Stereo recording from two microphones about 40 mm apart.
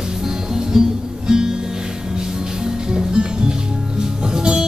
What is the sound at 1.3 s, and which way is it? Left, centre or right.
Music, centre.